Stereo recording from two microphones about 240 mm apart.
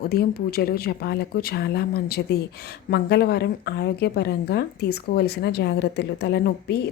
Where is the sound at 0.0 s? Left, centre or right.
Left.